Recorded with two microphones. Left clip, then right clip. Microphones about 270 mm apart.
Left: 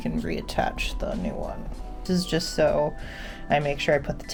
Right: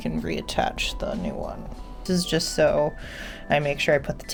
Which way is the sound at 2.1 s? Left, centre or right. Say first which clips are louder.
Right 2 dB; centre.